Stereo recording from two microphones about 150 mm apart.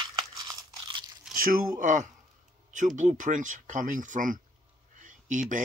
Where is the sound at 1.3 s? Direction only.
70° right (ahead or behind).